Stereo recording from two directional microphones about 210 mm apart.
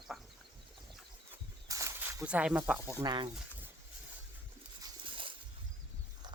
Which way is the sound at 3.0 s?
20° right (ahead or behind).